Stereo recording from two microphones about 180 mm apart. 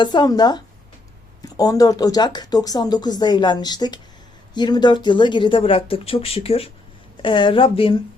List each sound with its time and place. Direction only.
0.0 s speech: 25° left (ahead or behind)